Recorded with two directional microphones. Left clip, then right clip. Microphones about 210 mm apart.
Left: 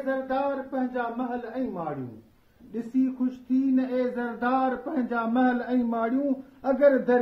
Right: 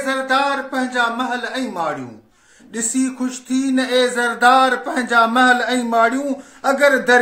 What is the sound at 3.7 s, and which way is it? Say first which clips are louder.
A man's voice: right 10 dB; 10° right (ahead or behind).